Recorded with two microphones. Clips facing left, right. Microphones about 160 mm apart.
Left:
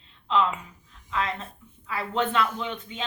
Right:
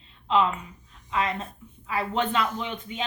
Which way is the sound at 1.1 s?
15° right (ahead or behind).